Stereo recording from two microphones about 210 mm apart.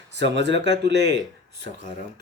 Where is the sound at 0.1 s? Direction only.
55° right (ahead or behind).